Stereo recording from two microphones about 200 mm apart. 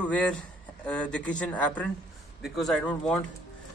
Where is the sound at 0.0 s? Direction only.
5° left (ahead or behind).